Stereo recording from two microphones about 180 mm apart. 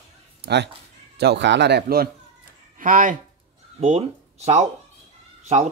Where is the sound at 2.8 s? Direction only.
45° right (ahead or behind).